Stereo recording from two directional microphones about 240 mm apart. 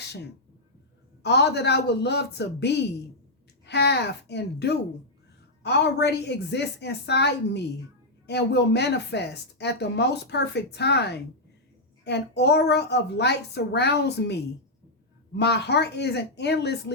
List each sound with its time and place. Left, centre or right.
1.2 s speech: left